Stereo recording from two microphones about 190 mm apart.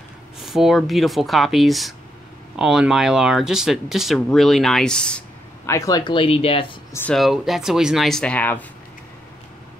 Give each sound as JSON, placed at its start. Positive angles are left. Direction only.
{"t": 0.4, "sound": "speech", "side_deg": 0}
{"t": 5.7, "sound": "speech", "side_deg": 15}
{"t": 6.9, "sound": "speech", "side_deg": 10}
{"t": 7.2, "sound": "speech", "side_deg": 0}